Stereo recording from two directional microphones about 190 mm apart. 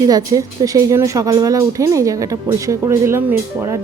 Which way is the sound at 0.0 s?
20° right (ahead or behind).